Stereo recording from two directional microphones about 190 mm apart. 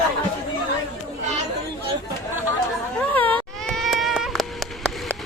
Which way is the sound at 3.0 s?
10° left (ahead or behind).